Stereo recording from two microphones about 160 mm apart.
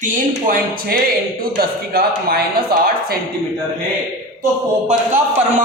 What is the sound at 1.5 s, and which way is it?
Speech, 75° right (ahead or behind).